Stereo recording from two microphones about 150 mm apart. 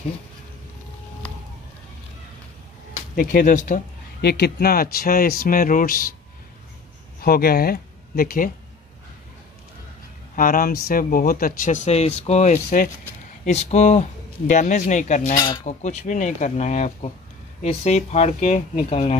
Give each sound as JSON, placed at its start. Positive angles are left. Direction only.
{"t": 3.2, "sound": "speech", "side_deg": 65}
{"t": 7.2, "sound": "speech", "side_deg": 90}
{"t": 10.3, "sound": "speech", "side_deg": 70}
{"t": 15.3, "sound": "speech", "side_deg": 25}
{"t": 15.6, "sound": "speech", "side_deg": 50}